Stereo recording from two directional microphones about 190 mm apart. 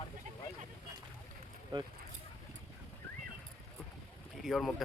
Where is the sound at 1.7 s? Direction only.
25° right (ahead or behind).